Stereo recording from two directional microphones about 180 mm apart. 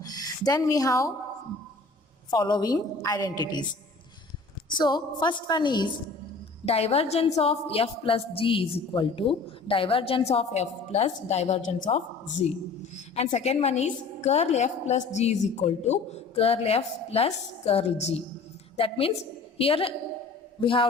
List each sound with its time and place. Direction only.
0.0 s speech: 20° left (ahead or behind)
2.3 s a woman's voice: 25° left (ahead or behind)
4.7 s a woman's voice: 25° left (ahead or behind)